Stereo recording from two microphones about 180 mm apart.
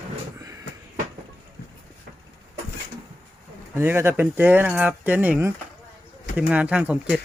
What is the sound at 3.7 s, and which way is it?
Speech, 15° right (ahead or behind).